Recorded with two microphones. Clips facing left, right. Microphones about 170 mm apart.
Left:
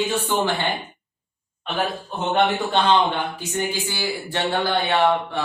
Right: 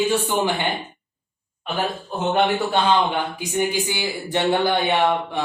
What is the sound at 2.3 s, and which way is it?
Speech, 10° right (ahead or behind).